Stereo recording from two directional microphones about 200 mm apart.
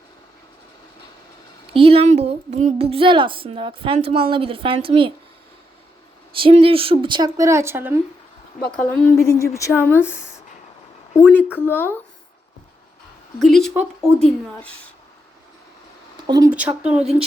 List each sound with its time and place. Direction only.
1.7 s a woman's voice: 30° right (ahead or behind)
6.3 s a woman's voice: 25° right (ahead or behind); by 7.9 s 10° right (ahead or behind)
8.9 s speech: 10° left (ahead or behind)
13.4 s a woman's voice: centre (ahead or behind)
16.2 s speech: 20° right (ahead or behind)
16.5 s speech: 5° right (ahead or behind)